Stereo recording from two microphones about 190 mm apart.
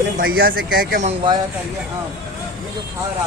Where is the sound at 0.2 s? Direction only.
50° right (ahead or behind).